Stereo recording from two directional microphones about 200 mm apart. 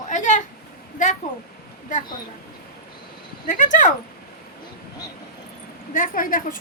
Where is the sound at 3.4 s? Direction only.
40° left (ahead or behind).